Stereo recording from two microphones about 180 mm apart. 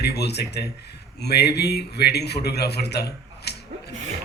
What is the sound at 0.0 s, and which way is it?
A man's voice, 65° left (ahead or behind).